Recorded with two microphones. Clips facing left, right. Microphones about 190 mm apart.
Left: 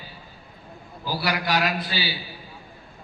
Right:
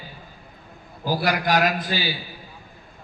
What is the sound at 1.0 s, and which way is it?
A man's voice, 45° right (ahead or behind).